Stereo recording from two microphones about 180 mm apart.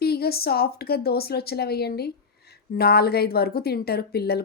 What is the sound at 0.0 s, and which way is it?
A woman's voice, 60° left (ahead or behind).